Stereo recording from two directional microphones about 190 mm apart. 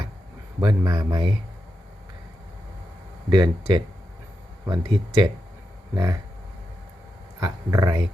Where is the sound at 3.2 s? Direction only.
20° right (ahead or behind).